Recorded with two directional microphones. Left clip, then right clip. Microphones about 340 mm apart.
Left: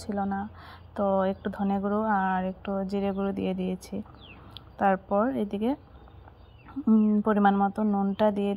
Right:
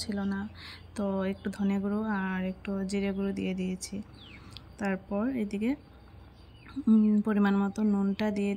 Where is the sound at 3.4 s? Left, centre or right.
Centre.